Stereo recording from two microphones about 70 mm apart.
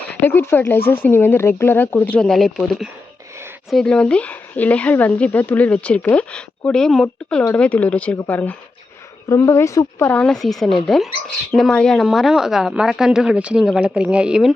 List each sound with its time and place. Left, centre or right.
0.3 s speech: left
2.1 s speech: centre
3.8 s speech: centre
6.7 s speech: centre; by 8.5 s left
9.3 s speech: left
10.2 s speech: centre
11.9 s speech: centre